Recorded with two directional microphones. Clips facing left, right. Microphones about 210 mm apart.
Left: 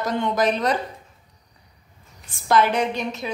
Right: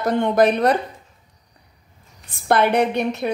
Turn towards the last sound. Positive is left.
turn(degrees=-60)  # may be behind; listen again after turning